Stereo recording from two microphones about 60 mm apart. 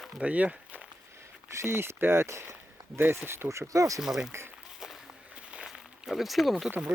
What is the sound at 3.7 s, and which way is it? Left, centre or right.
Speech, right.